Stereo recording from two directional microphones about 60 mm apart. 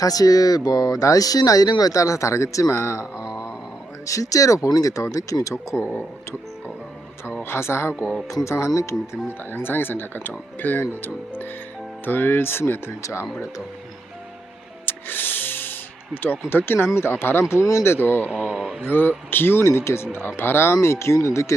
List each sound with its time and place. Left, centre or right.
0.0 s speech: left
4.0 s speech: left
7.4 s speech: left
9.2 s speech: left
13.0 s speech: left
14.8 s music: left
16.2 s speech: left
17.5 s speech: left
17.8 s speech: left
18.3 s speech: centre
18.9 s speech: left